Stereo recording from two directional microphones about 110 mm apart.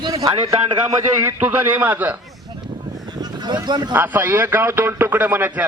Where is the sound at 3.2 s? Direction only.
40° right (ahead or behind).